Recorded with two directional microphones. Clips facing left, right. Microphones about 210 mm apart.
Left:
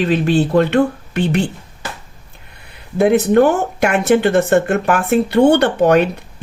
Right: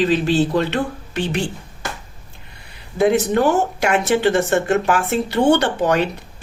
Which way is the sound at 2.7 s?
55° left (ahead or behind).